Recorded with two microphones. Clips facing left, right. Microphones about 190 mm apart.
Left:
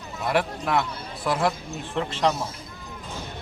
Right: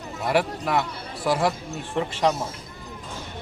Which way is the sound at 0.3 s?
5° right (ahead or behind).